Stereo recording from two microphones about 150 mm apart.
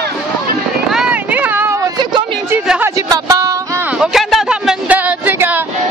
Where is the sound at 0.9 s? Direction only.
5° right (ahead or behind).